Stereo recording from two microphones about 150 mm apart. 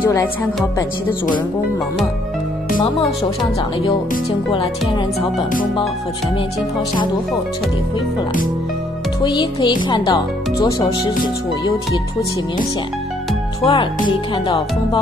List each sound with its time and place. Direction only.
0.0 s speech: 15° left (ahead or behind)
4.5 s speech: 35° left (ahead or behind)
9.2 s speech: 30° left (ahead or behind)
13.6 s speech: 35° left (ahead or behind)
14.0 s speech: 25° left (ahead or behind)